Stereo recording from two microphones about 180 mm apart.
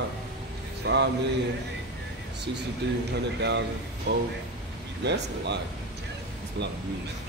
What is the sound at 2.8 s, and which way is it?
Speech, 75° right (ahead or behind).